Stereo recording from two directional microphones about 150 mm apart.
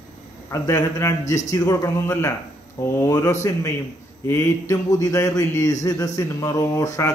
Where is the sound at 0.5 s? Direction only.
20° left (ahead or behind).